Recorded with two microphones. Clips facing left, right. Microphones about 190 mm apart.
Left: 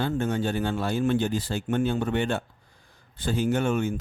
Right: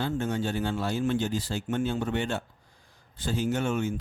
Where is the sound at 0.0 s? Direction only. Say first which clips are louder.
Left 3 dB; 55° left (ahead or behind).